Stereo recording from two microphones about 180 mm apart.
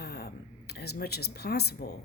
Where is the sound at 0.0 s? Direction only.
60° left (ahead or behind).